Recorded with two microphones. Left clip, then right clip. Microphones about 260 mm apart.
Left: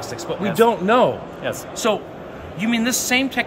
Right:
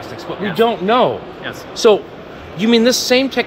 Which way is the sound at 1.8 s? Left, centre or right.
Right.